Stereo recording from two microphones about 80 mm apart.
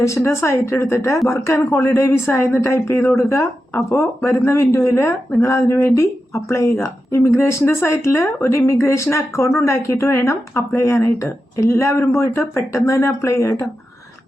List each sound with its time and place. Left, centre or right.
0.3 s speech: left